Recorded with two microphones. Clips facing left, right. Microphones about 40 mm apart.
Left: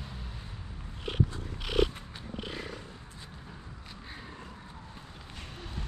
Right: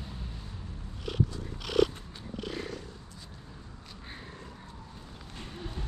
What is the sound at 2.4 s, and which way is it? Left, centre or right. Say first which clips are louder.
Purr: right 3 dB; centre.